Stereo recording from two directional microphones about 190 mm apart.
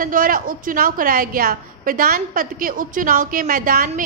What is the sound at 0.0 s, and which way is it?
A woman's voice, 45° right (ahead or behind).